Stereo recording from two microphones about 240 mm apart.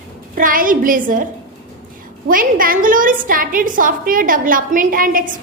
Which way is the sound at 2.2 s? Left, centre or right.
Right.